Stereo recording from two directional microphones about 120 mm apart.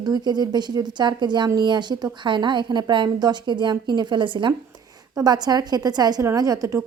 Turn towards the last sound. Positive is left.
turn(degrees=-30)  # may be behind; listen again after turning